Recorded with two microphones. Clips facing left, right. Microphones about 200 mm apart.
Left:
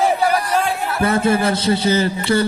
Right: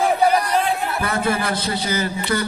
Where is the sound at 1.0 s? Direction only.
25° left (ahead or behind).